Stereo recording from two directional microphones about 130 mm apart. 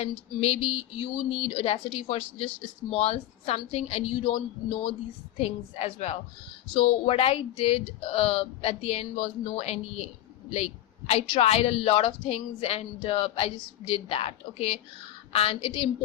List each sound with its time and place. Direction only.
0.0 s speech: 55° left (ahead or behind)
5.4 s a woman's voice: 55° left (ahead or behind)